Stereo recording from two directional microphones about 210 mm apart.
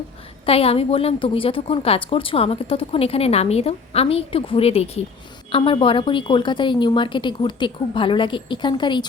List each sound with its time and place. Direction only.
0.4 s a woman's voice: 30° left (ahead or behind)